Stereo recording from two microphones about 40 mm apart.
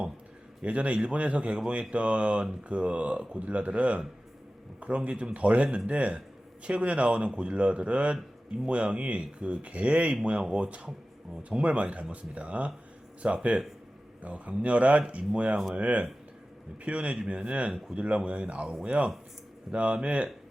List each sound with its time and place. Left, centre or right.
0.6 s speech: right
17.7 s speech: centre
17.9 s speech: right